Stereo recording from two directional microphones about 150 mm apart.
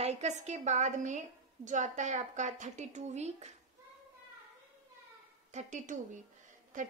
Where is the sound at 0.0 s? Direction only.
50° right (ahead or behind).